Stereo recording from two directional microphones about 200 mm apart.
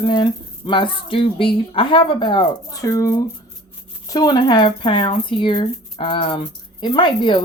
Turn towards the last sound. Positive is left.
turn(degrees=25)  # may be behind; listen again after turning